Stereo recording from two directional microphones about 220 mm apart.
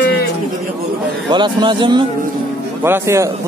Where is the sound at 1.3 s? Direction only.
20° right (ahead or behind).